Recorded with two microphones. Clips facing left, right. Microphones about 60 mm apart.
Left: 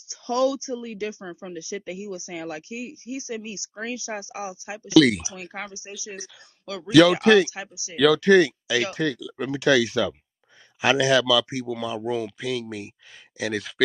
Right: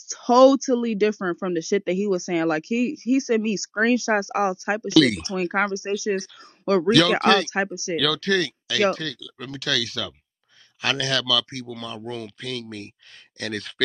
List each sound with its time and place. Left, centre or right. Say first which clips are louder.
0.1 s speech: right 9 dB; right
4.8 s speech: left 2 dB; centre
5.3 s speech: right 13 dB; right
6.9 s speech: left 4 dB; centre
7.5 s speech: right 12 dB; right
8.0 s speech: left 8 dB; centre